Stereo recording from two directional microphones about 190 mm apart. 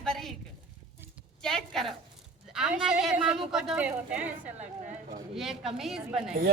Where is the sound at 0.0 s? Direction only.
Centre (ahead or behind).